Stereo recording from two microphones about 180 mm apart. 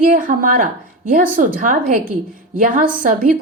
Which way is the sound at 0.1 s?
50° right (ahead or behind).